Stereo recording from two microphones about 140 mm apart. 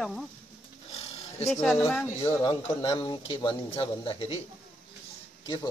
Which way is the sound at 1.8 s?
15° left (ahead or behind).